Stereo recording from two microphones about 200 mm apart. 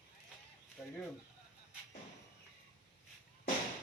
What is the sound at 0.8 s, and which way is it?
Speech, 5° right (ahead or behind).